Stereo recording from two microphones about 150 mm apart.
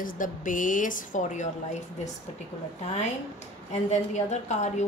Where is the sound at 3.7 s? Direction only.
50° left (ahead or behind).